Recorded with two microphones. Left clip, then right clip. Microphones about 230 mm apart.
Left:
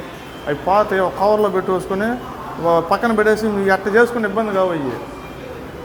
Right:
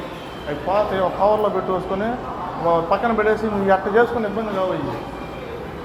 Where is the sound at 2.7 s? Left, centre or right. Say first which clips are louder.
Left 3 dB; left.